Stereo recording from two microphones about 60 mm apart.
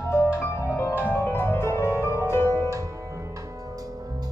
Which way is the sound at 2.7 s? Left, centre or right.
Right.